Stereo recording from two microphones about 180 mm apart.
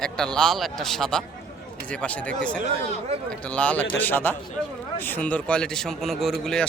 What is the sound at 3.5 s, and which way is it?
A man's voice, 5° left (ahead or behind).